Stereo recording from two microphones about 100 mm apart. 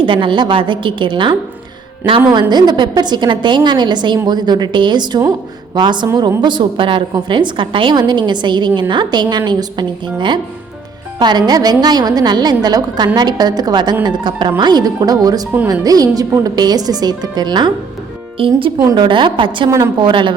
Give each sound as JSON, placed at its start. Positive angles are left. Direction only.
{"t": 0.0, "sound": "a woman's voice", "side_deg": -55}
{"t": 18.3, "sound": "a woman's voice", "side_deg": -65}